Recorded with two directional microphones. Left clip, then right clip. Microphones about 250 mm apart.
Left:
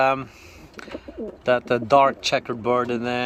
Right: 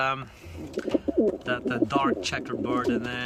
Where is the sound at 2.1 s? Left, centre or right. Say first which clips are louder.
Left 5 dB; centre.